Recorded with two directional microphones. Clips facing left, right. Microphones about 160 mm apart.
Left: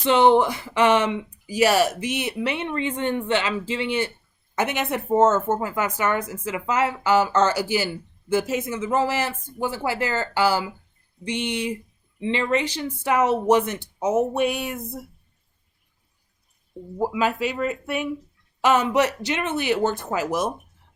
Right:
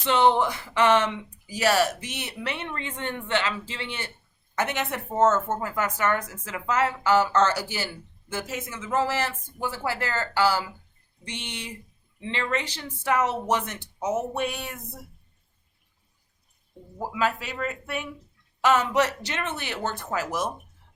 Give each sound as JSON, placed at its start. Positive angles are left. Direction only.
{"t": 0.0, "sound": "speech", "side_deg": 15}
{"t": 17.0, "sound": "speech", "side_deg": 15}